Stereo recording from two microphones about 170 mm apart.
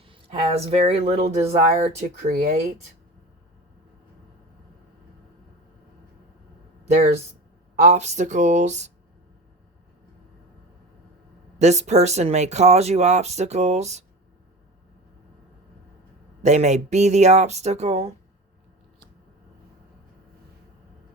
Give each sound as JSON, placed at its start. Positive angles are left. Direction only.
{"t": 0.0, "sound": "speech", "side_deg": -35}
{"t": 2.3, "sound": "speech", "side_deg": -60}
{"t": 6.9, "sound": "speech", "side_deg": -40}
{"t": 11.6, "sound": "speech", "side_deg": -40}
{"t": 16.4, "sound": "speech", "side_deg": -40}